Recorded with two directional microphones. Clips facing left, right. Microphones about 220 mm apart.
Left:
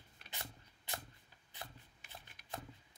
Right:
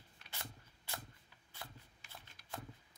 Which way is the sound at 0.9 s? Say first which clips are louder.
Left 1 dB; 20° left (ahead or behind).